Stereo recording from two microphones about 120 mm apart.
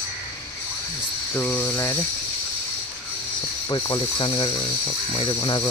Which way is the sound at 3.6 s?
35° left (ahead or behind).